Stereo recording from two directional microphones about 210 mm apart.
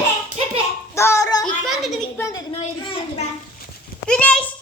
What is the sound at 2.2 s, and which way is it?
Speech, 15° left (ahead or behind).